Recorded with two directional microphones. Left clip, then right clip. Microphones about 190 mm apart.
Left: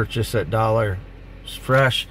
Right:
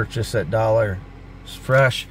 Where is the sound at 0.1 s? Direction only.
5° left (ahead or behind).